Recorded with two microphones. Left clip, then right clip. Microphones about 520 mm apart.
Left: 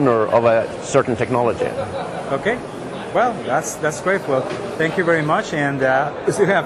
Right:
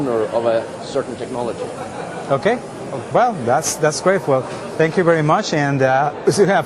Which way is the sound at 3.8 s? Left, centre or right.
Right.